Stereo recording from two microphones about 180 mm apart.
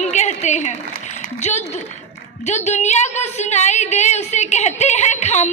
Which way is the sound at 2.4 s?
40° left (ahead or behind).